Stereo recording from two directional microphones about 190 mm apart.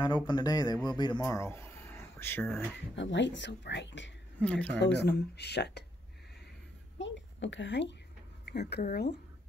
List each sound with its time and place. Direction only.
0.0 s speech: 25° left (ahead or behind)
3.0 s speech: 70° left (ahead or behind)
4.4 s speech: 5° left (ahead or behind)
5.0 s speech: 60° left (ahead or behind)
7.0 s a woman's voice: 75° left (ahead or behind)
8.5 s speech: 60° left (ahead or behind)